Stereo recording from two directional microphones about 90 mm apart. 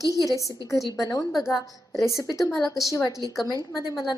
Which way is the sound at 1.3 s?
5° right (ahead or behind).